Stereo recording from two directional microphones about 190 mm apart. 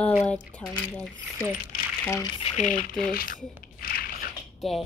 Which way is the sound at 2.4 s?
35° left (ahead or behind).